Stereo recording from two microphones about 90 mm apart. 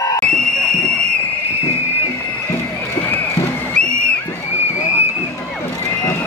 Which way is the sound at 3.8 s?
10° left (ahead or behind).